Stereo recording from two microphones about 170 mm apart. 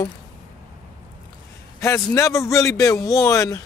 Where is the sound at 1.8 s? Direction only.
20° left (ahead or behind).